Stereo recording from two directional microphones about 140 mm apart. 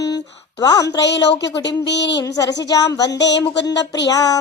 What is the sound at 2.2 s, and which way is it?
Speech, 25° left (ahead or behind).